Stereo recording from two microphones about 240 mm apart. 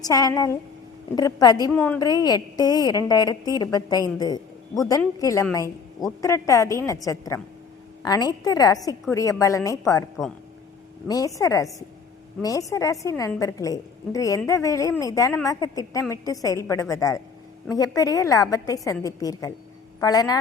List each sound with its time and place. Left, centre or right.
0.0 s a woman's voice: centre
11.1 s a woman's voice: centre